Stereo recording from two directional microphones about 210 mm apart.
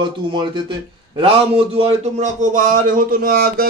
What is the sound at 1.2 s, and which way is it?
A man's voice, 25° right (ahead or behind).